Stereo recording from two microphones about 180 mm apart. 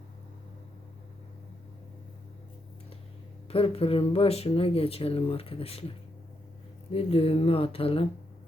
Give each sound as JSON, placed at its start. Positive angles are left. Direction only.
{"t": 3.5, "sound": "speech", "side_deg": 30}
{"t": 6.9, "sound": "speech", "side_deg": 35}